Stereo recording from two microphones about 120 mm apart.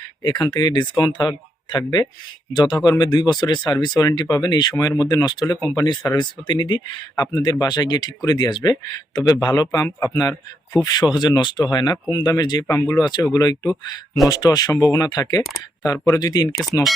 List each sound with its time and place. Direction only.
0.2 s speech: 35° left (ahead or behind)
12.7 s speech: 20° left (ahead or behind)